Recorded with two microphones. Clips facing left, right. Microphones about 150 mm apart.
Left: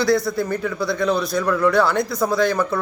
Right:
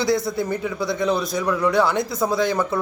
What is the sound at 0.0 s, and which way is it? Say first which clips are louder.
A man's voice: left 2 dB; 20° right (ahead or behind).